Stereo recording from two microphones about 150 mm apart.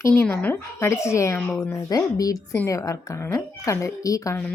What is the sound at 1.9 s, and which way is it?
Speech, 25° left (ahead or behind).